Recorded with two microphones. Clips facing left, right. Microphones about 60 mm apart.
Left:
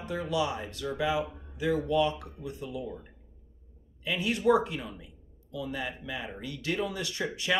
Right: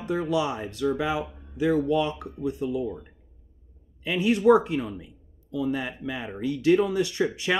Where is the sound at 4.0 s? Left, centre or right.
Right.